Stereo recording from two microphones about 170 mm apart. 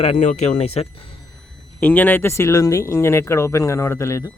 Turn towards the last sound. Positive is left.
turn(degrees=15)  # may be behind; listen again after turning